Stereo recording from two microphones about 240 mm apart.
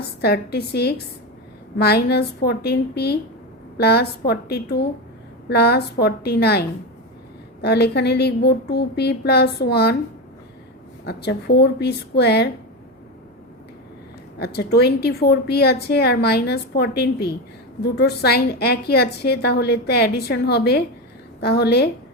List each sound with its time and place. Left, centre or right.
0.2 s a woman's voice: left
11.0 s a woman's voice: left
14.3 s a woman's voice: left